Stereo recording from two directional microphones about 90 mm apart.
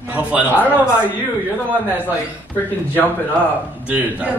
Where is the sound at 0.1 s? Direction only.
15° right (ahead or behind).